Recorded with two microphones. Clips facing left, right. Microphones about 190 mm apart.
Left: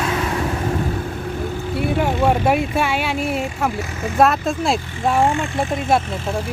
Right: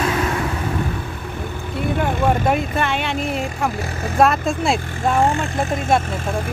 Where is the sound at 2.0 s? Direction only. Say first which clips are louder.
Left 1 dB; 10° left (ahead or behind).